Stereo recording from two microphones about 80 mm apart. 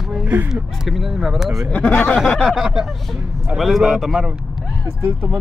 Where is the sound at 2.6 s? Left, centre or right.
Centre.